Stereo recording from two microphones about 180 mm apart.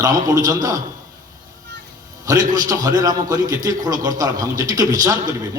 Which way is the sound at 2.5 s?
20° right (ahead or behind).